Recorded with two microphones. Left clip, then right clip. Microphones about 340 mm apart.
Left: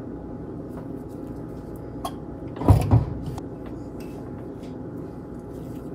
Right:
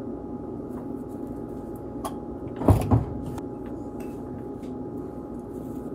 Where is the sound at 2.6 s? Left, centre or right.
Centre.